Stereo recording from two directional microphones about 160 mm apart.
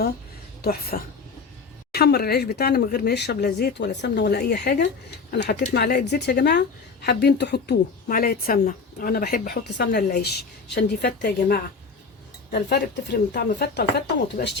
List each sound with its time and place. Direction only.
0.6 s a woman's voice: 70° left (ahead or behind)
1.9 s speech: 85° left; by 8.5 s 65° left (ahead or behind)
8.5 s speech: 55° left (ahead or behind); by 10.3 s 75° left (ahead or behind)
10.8 s a woman's voice: 85° left
14.4 s speech: 65° left (ahead or behind)